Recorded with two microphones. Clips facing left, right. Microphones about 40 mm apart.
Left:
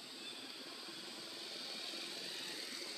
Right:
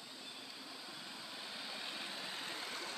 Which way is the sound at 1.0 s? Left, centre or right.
Right.